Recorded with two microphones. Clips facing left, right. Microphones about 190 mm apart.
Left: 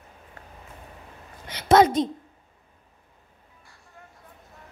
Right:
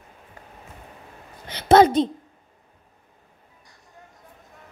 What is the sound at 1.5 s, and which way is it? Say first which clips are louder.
Speech: right 3 dB; 30° right (ahead or behind).